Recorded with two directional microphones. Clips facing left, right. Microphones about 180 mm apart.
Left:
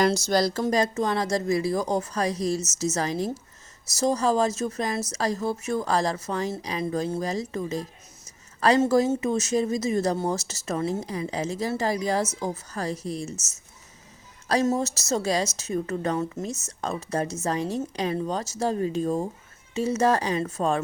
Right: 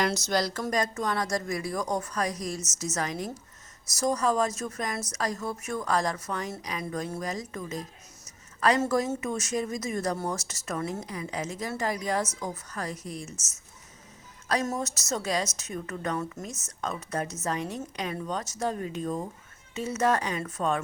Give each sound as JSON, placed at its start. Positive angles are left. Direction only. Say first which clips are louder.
{"t": 0.0, "sound": "a woman's voice", "louder": "left 5 dB", "side_deg": 35}
{"t": 14.4, "sound": "a woman's voice", "louder": "left 6 dB", "side_deg": 30}